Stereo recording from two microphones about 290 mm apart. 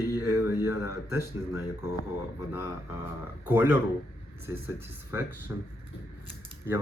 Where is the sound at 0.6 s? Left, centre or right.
Left.